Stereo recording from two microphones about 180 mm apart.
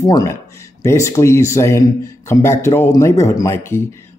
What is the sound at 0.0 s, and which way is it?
Speech, 20° left (ahead or behind).